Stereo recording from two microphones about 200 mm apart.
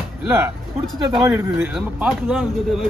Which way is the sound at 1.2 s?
15° right (ahead or behind).